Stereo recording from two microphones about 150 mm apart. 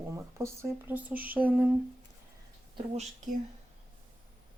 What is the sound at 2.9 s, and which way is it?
Speech, 55° right (ahead or behind).